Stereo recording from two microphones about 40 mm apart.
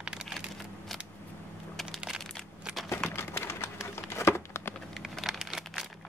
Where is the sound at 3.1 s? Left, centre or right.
Left.